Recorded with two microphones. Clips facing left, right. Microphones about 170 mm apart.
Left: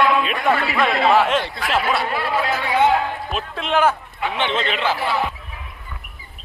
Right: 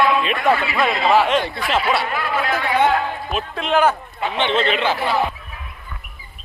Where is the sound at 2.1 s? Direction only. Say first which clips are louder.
Left 1 dB; 30° left (ahead or behind).